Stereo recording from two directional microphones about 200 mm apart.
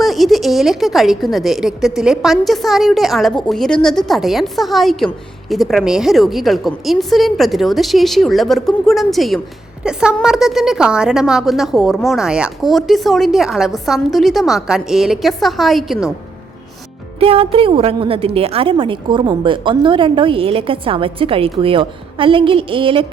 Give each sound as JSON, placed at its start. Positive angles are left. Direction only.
{"t": 0.0, "sound": "a woman's voice", "side_deg": 0}
{"t": 17.2, "sound": "a woman's voice", "side_deg": -30}